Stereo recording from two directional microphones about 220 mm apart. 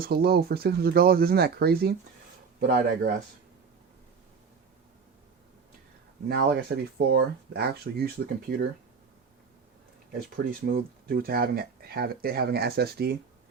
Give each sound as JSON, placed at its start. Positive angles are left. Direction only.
{"t": 0.0, "sound": "speech", "side_deg": -45}
{"t": 6.2, "sound": "speech", "side_deg": -45}
{"t": 10.3, "sound": "speech", "side_deg": -45}